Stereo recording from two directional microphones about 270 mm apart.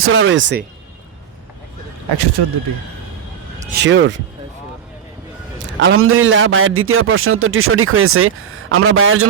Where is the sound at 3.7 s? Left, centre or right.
Right.